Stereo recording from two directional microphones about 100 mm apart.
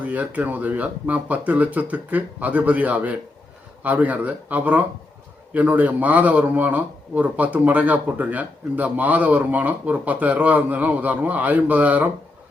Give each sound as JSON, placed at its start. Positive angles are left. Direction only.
{"t": 0.0, "sound": "speech", "side_deg": -15}